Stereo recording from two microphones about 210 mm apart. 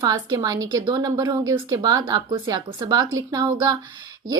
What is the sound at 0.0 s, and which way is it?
A woman's voice, 20° right (ahead or behind).